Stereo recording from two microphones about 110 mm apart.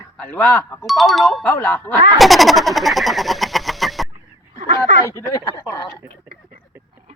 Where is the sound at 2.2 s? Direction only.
Centre (ahead or behind).